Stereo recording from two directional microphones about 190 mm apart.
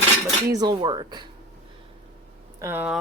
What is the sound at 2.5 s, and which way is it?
Speech, 10° right (ahead or behind).